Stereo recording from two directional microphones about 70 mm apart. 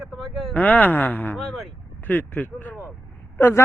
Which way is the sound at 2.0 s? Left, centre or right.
Left.